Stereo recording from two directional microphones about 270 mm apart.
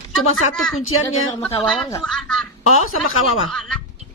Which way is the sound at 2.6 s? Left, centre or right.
Left.